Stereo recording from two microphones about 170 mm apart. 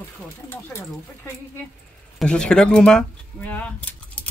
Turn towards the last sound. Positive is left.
turn(degrees=10)  # may be behind; listen again after turning